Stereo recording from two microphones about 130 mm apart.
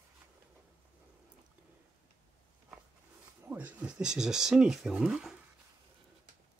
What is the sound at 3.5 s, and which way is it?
Speech, 10° right (ahead or behind).